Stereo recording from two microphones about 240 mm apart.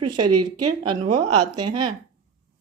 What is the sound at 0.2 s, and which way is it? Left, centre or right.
A woman's voice, right.